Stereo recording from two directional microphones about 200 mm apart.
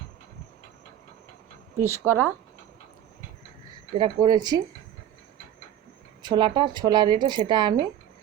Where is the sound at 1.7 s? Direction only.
90° right.